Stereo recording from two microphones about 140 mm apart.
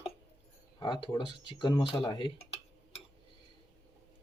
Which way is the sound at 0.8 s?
35° left (ahead or behind).